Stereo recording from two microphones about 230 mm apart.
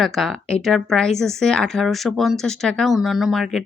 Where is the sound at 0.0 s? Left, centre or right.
Centre.